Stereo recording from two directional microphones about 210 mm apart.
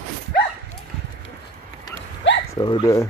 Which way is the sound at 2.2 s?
60° left (ahead or behind).